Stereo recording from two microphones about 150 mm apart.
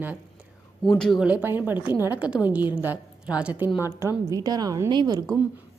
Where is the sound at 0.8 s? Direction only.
5° left (ahead or behind).